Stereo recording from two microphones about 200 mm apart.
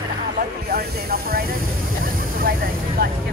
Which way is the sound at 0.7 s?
50° right (ahead or behind).